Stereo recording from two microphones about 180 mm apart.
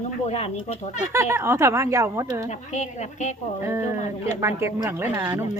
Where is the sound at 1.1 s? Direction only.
15° right (ahead or behind).